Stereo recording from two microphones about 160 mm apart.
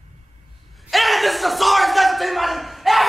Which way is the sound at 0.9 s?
Centre (ahead or behind).